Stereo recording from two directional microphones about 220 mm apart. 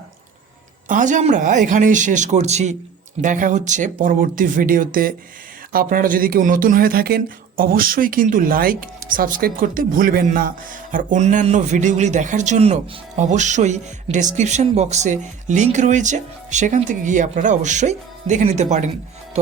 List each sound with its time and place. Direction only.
0.9 s speech: 35° right (ahead or behind)